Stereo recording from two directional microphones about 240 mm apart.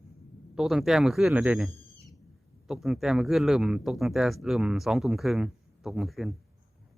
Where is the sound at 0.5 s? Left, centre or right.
Centre.